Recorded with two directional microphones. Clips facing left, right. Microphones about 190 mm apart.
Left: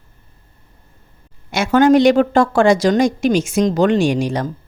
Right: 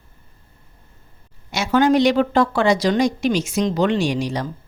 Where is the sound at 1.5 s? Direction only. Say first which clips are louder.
Left 4 dB; 50° left (ahead or behind).